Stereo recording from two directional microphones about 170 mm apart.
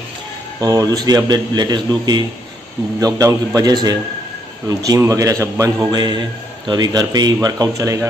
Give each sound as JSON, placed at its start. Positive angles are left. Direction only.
{"t": 0.6, "sound": "speech", "side_deg": -20}